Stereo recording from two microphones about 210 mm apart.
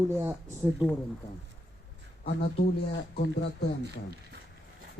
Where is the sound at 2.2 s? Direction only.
50° left (ahead or behind).